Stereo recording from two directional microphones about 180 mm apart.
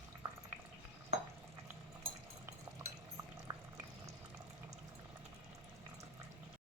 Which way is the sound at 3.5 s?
20° right (ahead or behind).